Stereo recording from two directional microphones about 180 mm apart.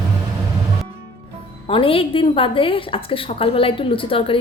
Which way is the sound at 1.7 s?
30° left (ahead or behind).